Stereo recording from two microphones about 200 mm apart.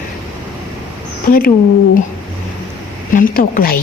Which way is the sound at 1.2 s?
45° left (ahead or behind).